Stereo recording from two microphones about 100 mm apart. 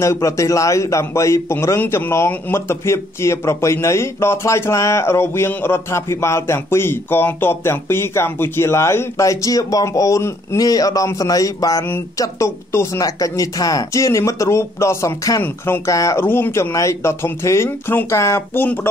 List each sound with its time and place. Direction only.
0.0 s a man's voice: 30° left (ahead or behind)
15.4 s a man's voice: 25° left (ahead or behind)